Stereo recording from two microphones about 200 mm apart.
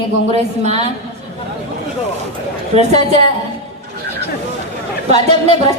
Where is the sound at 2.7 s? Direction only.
35° right (ahead or behind).